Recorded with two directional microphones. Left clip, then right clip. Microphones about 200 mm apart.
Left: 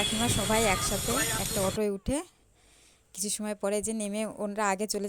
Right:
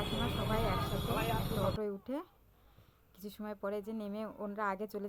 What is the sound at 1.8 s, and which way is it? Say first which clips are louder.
Speech: left 9 dB; 40° left (ahead or behind).